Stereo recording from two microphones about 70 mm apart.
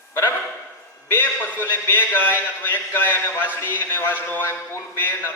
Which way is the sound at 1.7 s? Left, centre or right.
Left.